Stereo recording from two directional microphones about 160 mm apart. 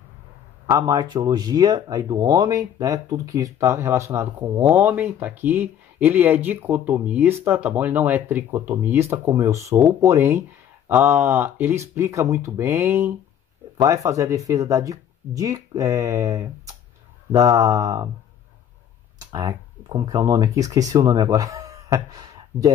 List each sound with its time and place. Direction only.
0.7 s speech: 25° right (ahead or behind)
19.1 s speech: 20° right (ahead or behind)